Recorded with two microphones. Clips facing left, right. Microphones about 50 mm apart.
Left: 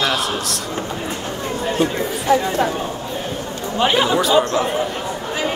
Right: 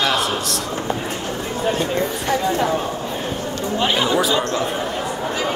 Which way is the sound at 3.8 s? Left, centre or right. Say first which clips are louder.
Left 3 dB; centre.